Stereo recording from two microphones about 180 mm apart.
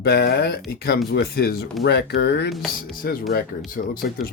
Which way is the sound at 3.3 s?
55° left (ahead or behind).